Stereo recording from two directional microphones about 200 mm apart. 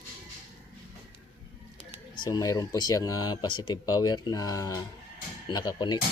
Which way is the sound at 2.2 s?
20° left (ahead or behind).